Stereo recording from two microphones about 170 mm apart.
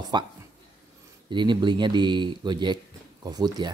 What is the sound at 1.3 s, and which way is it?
Speech, 25° right (ahead or behind).